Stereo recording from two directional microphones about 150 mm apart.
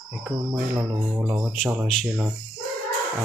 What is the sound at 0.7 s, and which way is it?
Speech, 10° right (ahead or behind).